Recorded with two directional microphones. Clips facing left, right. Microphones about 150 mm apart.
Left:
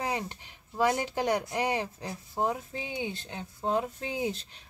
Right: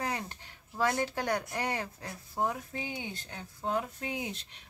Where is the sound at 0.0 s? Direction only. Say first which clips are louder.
Left 3 dB; 20° left (ahead or behind).